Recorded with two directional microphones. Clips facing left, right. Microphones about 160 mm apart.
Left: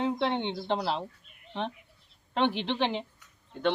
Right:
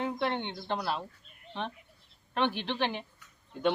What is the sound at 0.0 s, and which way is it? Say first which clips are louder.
Speech: left 3 dB; 20° left (ahead or behind).